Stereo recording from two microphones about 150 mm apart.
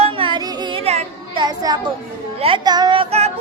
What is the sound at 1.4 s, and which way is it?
Children playing, 25° right (ahead or behind).